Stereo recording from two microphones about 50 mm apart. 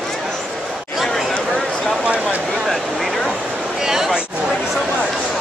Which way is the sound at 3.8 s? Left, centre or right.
Centre.